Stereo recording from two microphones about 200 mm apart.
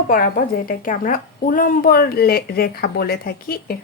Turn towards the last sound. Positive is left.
turn(degrees=50)  # may be behind; listen again after turning